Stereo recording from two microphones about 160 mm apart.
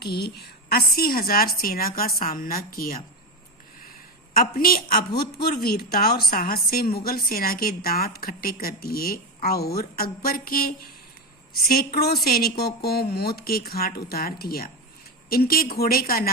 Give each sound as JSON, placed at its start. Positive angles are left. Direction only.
{"t": 0.0, "sound": "a woman's voice", "side_deg": 90}
{"t": 4.4, "sound": "a woman's voice", "side_deg": 65}